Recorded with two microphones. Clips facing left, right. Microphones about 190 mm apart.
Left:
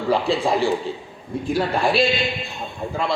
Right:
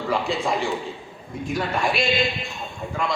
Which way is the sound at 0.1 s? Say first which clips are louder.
Left 5 dB; 30° left (ahead or behind).